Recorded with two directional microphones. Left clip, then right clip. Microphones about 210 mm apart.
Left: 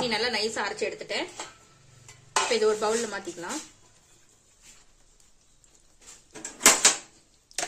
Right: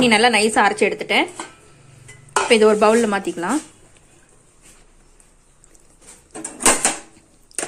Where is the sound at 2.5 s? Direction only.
40° right (ahead or behind).